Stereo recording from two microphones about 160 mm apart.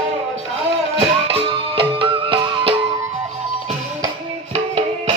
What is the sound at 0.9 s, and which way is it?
Music, 35° right (ahead or behind).